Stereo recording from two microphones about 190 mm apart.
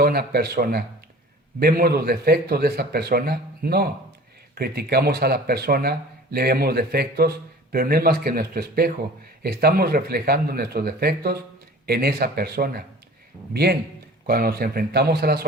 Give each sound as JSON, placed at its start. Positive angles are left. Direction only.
{"t": 0.0, "sound": "speech", "side_deg": -55}